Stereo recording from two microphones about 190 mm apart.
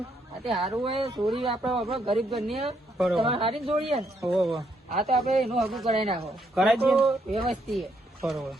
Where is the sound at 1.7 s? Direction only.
30° right (ahead or behind).